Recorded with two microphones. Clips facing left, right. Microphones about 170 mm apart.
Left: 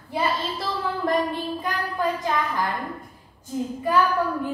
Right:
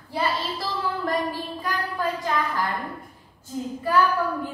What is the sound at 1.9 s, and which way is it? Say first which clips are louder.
Speech: left 2 dB; 20° left (ahead or behind).